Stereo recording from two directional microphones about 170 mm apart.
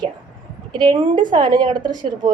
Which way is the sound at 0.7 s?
25° right (ahead or behind).